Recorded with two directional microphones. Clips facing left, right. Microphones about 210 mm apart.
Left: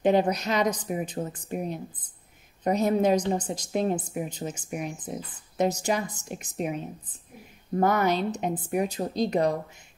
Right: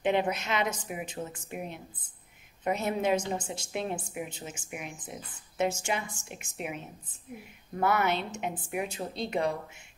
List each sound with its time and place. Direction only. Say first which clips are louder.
0.0 s a woman's voice: left 5 dB; 40° left (ahead or behind)